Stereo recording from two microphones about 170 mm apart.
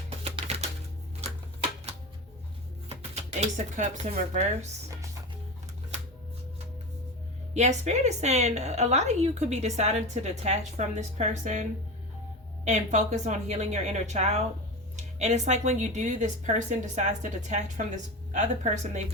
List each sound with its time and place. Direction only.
0.3 s music: 40° right (ahead or behind)
1.2 s typewriter: 35° right (ahead or behind)
3.8 s speech: 45° right (ahead or behind)
7.5 s speech: 40° right (ahead or behind)
12.6 s speech: 45° right (ahead or behind)